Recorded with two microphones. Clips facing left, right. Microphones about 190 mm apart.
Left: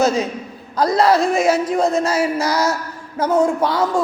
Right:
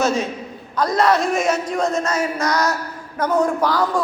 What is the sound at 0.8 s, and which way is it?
A woman's voice, 30° left (ahead or behind).